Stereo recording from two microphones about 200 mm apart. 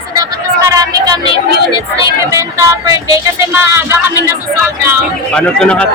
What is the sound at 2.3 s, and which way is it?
Speech, 15° right (ahead or behind).